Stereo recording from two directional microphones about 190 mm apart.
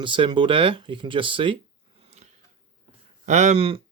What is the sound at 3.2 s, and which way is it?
Speech, 40° right (ahead or behind).